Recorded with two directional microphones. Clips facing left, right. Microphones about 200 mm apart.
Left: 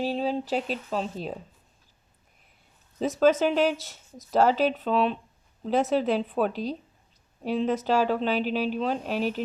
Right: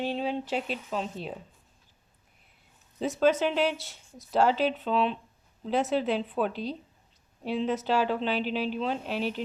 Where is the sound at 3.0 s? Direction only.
45° left (ahead or behind).